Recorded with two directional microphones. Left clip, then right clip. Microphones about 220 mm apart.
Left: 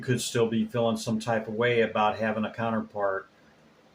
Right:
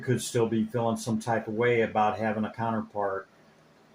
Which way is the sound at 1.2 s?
20° right (ahead or behind).